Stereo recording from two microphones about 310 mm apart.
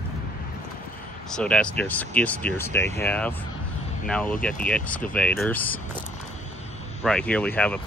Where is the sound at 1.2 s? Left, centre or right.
Centre.